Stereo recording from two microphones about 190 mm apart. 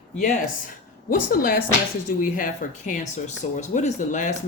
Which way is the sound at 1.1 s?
50° left (ahead or behind).